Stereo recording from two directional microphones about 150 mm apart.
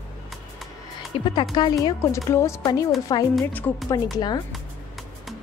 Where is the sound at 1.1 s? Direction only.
35° left (ahead or behind).